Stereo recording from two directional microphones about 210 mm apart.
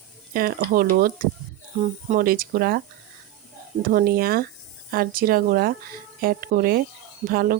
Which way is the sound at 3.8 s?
45° right (ahead or behind).